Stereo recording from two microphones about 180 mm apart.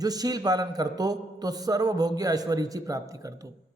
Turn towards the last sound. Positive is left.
turn(degrees=-20)  # may be behind; listen again after turning